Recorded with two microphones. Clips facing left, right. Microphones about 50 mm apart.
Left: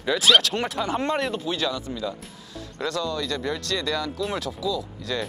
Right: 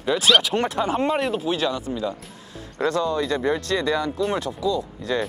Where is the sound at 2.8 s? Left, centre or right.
Centre.